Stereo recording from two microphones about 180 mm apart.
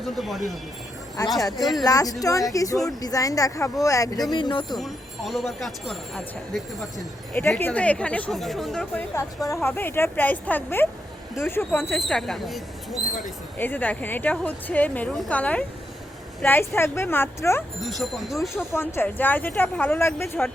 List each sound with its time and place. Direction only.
0.0 s speech: centre (ahead or behind)
1.8 s speech: 20° left (ahead or behind)
4.8 s speech: centre (ahead or behind)
7.3 s a woman's voice: 10° left (ahead or behind)
9.1 s a woman's voice: 15° left (ahead or behind)
11.9 s a woman's voice: centre (ahead or behind)
17.7 s speech: centre (ahead or behind)
18.7 s a woman's voice: 15° left (ahead or behind)